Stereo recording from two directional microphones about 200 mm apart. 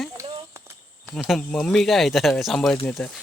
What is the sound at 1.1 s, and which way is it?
A man's voice, centre (ahead or behind).